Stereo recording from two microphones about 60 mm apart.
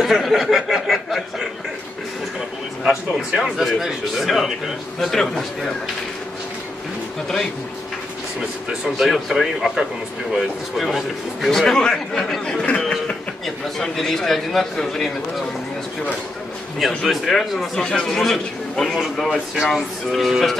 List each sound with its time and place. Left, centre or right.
0.0 s a man's voice: centre
2.8 s a man's voice: centre
8.9 s a man's voice: centre
13.7 s a man's voice: centre
16.8 s a man's voice: centre
17.7 s speech: centre
18.1 s a man's voice: centre
19.3 s a man's voice: centre